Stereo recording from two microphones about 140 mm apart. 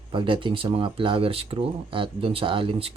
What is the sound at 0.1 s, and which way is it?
Speech, 40° right (ahead or behind).